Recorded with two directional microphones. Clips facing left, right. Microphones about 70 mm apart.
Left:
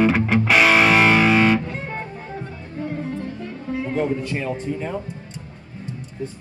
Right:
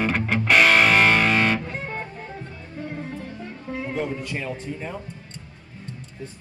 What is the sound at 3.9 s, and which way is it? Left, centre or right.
A man's voice, centre.